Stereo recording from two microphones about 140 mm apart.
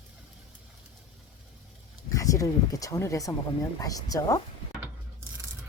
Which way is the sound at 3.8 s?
25° left (ahead or behind).